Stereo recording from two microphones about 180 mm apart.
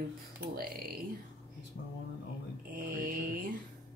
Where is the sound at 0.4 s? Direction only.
55° right (ahead or behind).